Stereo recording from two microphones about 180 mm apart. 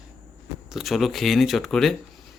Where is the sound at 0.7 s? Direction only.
Centre (ahead or behind).